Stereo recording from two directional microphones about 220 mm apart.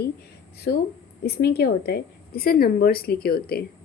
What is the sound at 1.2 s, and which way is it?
A woman's voice, 45° left (ahead or behind).